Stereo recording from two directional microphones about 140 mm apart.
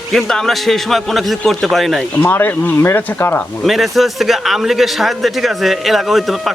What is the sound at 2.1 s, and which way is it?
Speech, 15° left (ahead or behind).